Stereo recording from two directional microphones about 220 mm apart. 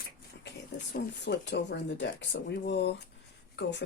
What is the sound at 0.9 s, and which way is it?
Speech, 50° left (ahead or behind).